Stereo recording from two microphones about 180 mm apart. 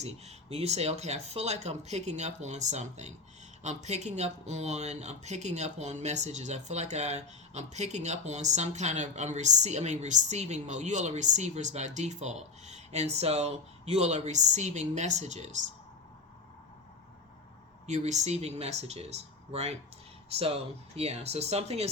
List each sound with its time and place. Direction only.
0.0 s speech: 35° right (ahead or behind)
17.8 s speech: 40° right (ahead or behind)